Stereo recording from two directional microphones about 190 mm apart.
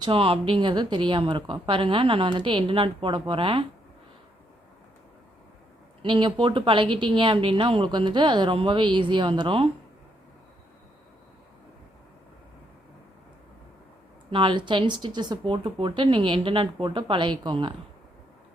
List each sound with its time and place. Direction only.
0.0 s a woman's voice: 30° right (ahead or behind)
6.0 s a woman's voice: 25° right (ahead or behind)
14.3 s a woman's voice: 25° right (ahead or behind)